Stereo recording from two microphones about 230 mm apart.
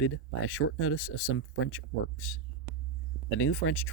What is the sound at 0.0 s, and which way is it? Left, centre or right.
Speech, left.